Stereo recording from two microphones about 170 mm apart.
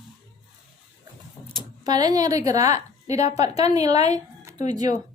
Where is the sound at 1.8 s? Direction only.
25° right (ahead or behind).